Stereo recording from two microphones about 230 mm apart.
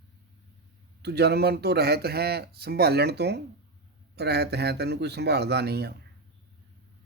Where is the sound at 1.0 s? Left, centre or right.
Right.